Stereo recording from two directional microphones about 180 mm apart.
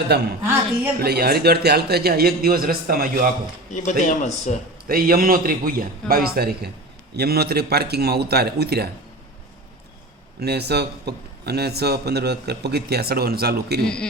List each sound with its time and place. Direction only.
0.1 s a man's voice: 65° right (ahead or behind)
3.7 s a man's voice: 45° left (ahead or behind)
4.9 s a man's voice: 55° right (ahead or behind)
10.4 s a man's voice: 65° right (ahead or behind)
13.8 s speech: 5° left (ahead or behind)